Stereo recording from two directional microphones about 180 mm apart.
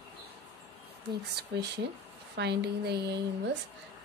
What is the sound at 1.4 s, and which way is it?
Speech, 60° right (ahead or behind).